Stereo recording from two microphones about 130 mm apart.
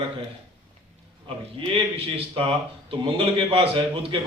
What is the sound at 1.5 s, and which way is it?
Speech, 45° right (ahead or behind).